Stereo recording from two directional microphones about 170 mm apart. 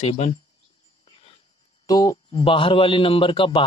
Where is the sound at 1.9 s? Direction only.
20° left (ahead or behind).